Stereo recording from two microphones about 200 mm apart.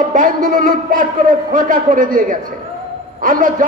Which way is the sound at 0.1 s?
40° right (ahead or behind).